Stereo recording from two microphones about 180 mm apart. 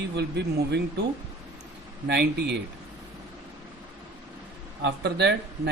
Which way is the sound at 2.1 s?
70° right (ahead or behind).